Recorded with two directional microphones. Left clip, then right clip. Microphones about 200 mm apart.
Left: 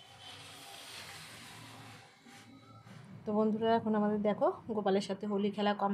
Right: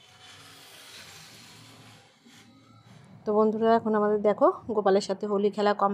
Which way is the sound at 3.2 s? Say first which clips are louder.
Right 9 dB; 30° right (ahead or behind).